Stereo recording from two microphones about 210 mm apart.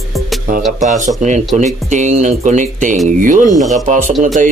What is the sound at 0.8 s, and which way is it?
Speech, 35° right (ahead or behind).